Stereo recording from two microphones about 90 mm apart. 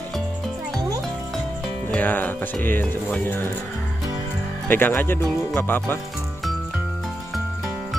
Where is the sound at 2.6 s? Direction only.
20° left (ahead or behind).